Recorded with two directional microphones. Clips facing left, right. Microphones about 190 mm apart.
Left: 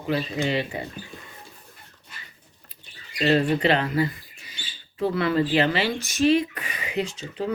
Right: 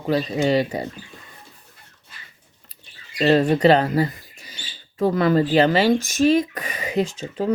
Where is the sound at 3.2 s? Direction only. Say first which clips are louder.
Right 4 dB; 40° right (ahead or behind).